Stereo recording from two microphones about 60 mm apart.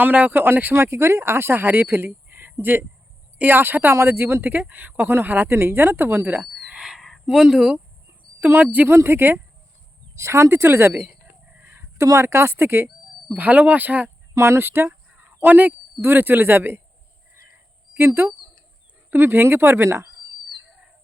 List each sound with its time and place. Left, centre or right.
0.0 s speech: right
6.7 s a sound: centre
8.4 s speech: right
8.9 s speech: right
10.2 s speech: right
11.1 s livestock: centre
11.6 s a sound: right
12.0 s speech: right
13.3 s speech: right
14.3 s speech: right
15.1 s a sound: right
15.4 s speech: right
17.9 s speech: right
20.7 s frog: centre